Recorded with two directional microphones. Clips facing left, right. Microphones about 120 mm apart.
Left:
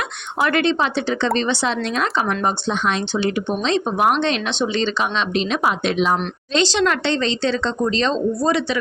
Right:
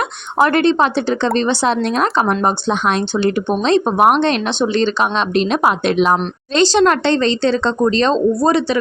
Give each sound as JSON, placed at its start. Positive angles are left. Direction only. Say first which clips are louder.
{"t": 0.3, "sound": "speech", "louder": "right 5 dB", "side_deg": -40}
{"t": 6.6, "sound": "speech", "louder": "right 6 dB", "side_deg": -45}